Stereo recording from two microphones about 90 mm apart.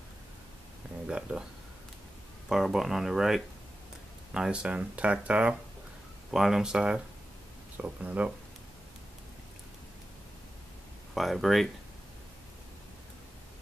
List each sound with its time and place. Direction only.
1.0 s speech: 10° right (ahead or behind)
2.5 s speech: 5° right (ahead or behind)
6.3 s speech: 5° right (ahead or behind)
11.1 s speech: centre (ahead or behind)